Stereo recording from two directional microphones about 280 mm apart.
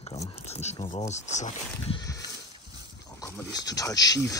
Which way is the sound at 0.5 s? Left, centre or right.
Left.